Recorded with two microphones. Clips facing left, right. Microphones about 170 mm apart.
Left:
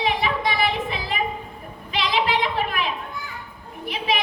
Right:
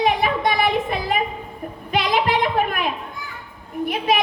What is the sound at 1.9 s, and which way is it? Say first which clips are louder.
Speech: right 3 dB; 50° right (ahead or behind).